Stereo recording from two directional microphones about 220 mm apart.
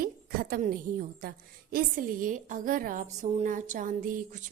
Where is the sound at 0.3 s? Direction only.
40° right (ahead or behind).